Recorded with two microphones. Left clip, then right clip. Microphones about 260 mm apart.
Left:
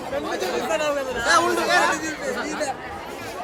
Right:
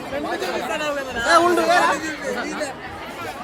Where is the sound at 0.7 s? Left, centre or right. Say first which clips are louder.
Left 1 dB; left.